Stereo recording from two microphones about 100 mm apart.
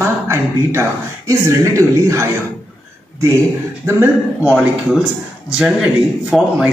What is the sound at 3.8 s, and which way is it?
Speech, 20° right (ahead or behind).